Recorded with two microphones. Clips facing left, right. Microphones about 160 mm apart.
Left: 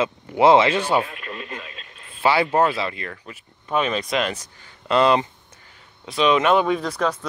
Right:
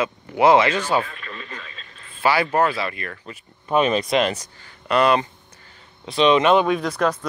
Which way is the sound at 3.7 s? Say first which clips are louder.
Right 4 dB; 40° right (ahead or behind).